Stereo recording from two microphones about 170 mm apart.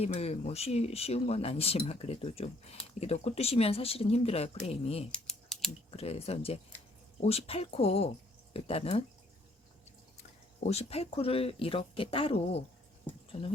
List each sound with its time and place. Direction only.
0.0 s speech: 35° left (ahead or behind)
5.1 s typing: 5° left (ahead or behind)
6.0 s speech: 35° left (ahead or behind)
10.2 s speech: 40° left (ahead or behind)